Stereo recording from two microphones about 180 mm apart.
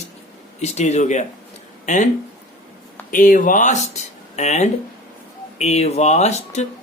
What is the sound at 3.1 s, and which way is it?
Speech, 45° left (ahead or behind).